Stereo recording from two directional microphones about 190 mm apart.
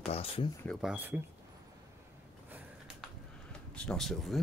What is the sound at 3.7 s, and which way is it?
Speech, 5° left (ahead or behind).